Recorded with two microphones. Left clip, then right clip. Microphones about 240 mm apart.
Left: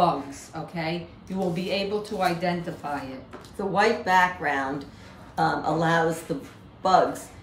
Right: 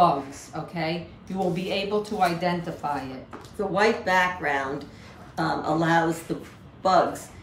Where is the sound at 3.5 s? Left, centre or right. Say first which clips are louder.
Even; centre.